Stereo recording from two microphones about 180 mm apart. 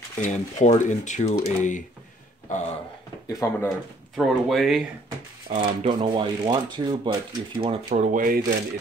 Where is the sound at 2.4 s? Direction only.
40° left (ahead or behind).